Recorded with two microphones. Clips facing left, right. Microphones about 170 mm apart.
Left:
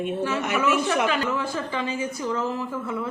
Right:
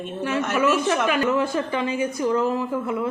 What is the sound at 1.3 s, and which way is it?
Speech, 20° right (ahead or behind).